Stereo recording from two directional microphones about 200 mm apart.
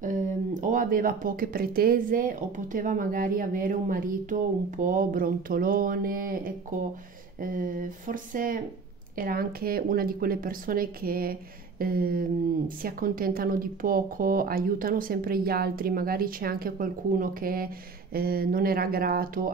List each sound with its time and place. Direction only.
0.0 s speech: 40° right (ahead or behind)